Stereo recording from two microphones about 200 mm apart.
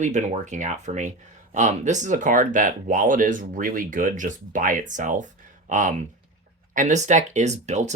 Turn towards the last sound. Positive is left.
turn(degrees=-35)  # may be behind; listen again after turning